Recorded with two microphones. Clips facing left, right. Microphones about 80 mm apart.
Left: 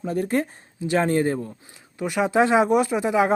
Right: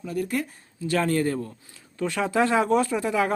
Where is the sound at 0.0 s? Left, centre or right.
Left.